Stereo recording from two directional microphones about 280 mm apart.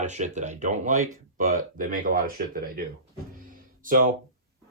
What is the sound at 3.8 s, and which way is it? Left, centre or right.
Speech, right.